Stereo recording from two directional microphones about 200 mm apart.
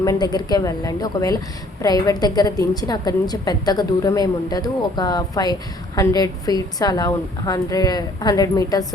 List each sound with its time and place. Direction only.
0.0 s a woman's voice: 20° left (ahead or behind)